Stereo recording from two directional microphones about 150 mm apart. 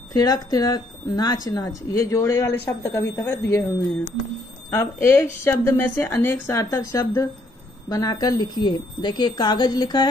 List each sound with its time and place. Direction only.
0.1 s a woman's voice: 25° left (ahead or behind)